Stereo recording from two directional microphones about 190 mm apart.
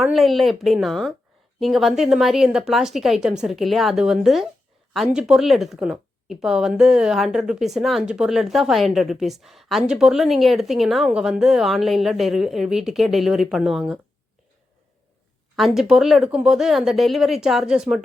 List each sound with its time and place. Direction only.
0.0 s a woman's voice: centre (ahead or behind)
15.5 s a woman's voice: centre (ahead or behind)